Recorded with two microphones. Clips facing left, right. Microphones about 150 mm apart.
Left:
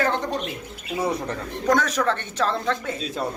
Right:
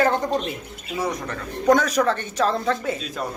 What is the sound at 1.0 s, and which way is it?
Speech, 30° left (ahead or behind).